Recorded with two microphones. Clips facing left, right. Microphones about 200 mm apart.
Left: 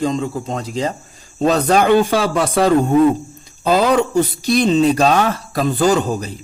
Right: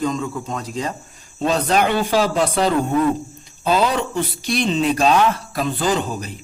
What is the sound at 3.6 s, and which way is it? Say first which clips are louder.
A man's voice: left 4 dB; 40° left (ahead or behind).